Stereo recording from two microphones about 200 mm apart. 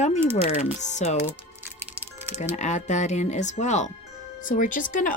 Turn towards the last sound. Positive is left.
turn(degrees=40)  # may be behind; listen again after turning